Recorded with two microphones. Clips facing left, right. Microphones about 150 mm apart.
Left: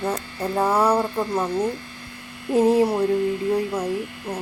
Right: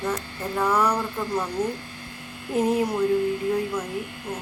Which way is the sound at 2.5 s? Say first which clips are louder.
Left 5 dB; 30° left (ahead or behind).